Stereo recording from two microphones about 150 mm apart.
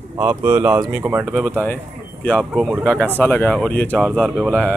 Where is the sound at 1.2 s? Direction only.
5° left (ahead or behind).